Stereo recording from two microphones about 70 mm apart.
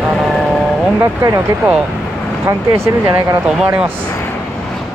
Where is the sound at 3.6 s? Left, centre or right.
Right.